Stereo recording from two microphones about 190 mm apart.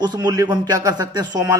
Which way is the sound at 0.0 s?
20° right (ahead or behind).